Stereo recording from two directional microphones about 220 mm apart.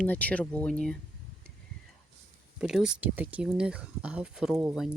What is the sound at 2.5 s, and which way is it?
Speech, 5° right (ahead or behind).